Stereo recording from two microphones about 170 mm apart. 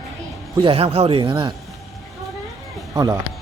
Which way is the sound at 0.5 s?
30° right (ahead or behind).